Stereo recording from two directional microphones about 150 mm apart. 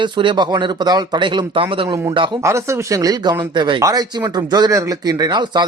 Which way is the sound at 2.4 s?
20° right (ahead or behind).